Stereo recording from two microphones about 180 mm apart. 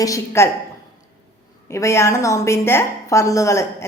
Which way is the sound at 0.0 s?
20° left (ahead or behind).